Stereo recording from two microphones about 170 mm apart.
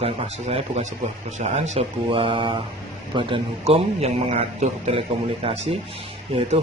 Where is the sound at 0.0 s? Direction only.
35° right (ahead or behind).